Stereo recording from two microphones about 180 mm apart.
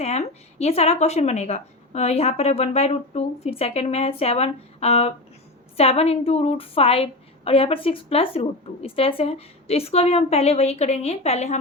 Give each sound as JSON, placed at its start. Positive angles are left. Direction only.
{"t": 0.0, "sound": "a woman's voice", "side_deg": 35}